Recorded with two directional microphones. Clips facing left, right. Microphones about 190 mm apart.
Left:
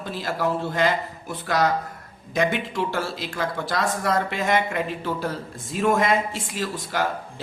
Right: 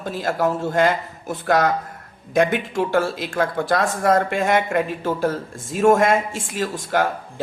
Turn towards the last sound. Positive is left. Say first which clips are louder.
# right 5 dB
turn(degrees=-50)  # may be behind; listen again after turning